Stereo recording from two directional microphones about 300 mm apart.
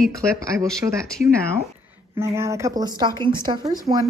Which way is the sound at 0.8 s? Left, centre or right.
Centre.